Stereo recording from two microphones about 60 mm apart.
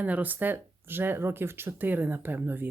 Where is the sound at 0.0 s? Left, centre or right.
Right.